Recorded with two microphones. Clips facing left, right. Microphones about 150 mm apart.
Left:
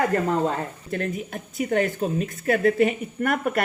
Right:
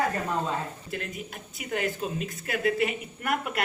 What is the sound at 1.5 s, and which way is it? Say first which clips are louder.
A woman's voice: left 8 dB; 45° left (ahead or behind).